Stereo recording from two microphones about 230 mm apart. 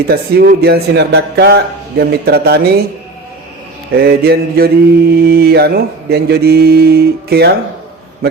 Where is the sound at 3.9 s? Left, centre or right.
Right.